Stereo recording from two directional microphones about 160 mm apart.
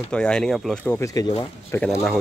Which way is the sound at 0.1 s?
5° left (ahead or behind).